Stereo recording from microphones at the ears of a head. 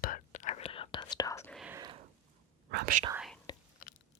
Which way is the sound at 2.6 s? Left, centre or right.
Right.